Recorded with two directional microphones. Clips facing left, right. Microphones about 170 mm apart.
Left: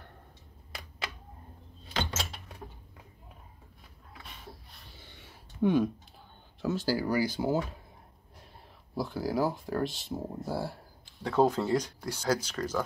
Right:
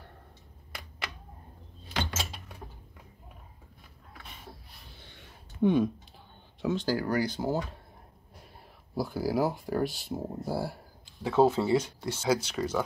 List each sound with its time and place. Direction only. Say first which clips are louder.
5.2 s a sound: right 2 dB; centre (ahead or behind)
6.6 s speech: right 1 dB; 5° left (ahead or behind)
8.9 s speech: right 2 dB; 5° right (ahead or behind)